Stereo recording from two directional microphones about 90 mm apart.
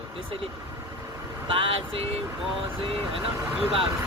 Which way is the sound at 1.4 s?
80° right.